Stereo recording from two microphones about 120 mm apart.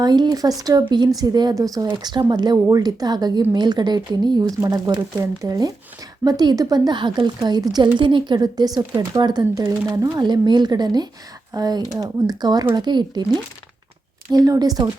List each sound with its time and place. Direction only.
0.0 s speech: 35° right (ahead or behind)
14.3 s speech: 30° right (ahead or behind)